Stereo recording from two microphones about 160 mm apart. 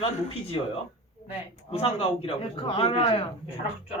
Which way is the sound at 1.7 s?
40° left (ahead or behind).